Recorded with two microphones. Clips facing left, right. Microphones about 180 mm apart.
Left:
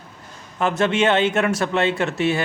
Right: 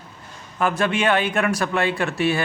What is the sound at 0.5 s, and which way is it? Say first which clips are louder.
Speech: left 2 dB; 20° left (ahead or behind).